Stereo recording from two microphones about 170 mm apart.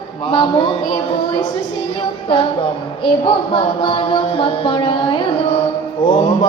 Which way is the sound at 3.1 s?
30° left (ahead or behind).